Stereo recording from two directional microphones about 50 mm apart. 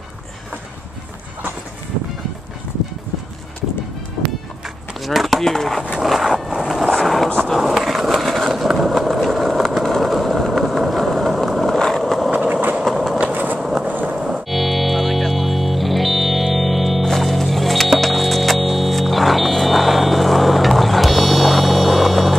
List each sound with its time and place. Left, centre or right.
5.0 s speech: centre
6.0 s vehicle: centre
6.5 s vehicle: centre
6.8 s a sound: centre
7.3 s skateboard: centre
7.6 s skateboard: centre
8.6 s vehicle: centre
12.4 s train: right
12.8 s train: centre
13.3 s vehicle: right
13.6 s a sound: centre
13.8 s vehicle: right
14.1 s music: centre
14.5 s music: centre